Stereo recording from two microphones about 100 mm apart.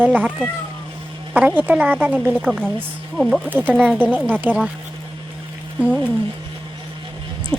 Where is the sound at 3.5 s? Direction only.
15° right (ahead or behind).